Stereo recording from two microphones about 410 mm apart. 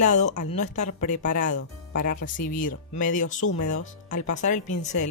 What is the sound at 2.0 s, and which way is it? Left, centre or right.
Speech, centre.